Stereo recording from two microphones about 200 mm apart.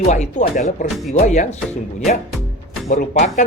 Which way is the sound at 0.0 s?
35° left (ahead or behind).